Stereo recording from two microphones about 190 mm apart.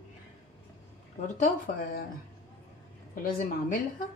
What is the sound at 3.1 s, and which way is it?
Speech, 45° left (ahead or behind).